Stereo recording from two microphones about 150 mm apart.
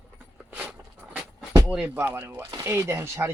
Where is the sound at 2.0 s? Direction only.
15° right (ahead or behind).